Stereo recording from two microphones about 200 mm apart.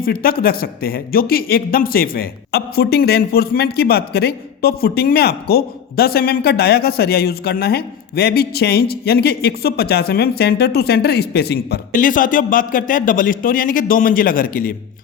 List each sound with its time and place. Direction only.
0.0 s speech: 50° left (ahead or behind)